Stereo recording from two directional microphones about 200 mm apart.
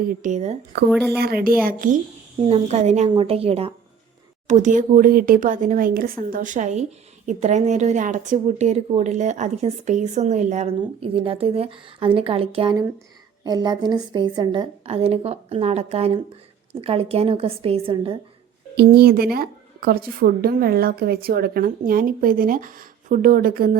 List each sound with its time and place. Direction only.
0.0 s a woman's voice: 40° right (ahead or behind)
1.2 s a woman's voice: 50° right (ahead or behind)
2.5 s a woman's voice: 35° right (ahead or behind)
18.8 s a woman's voice: 50° right (ahead or behind)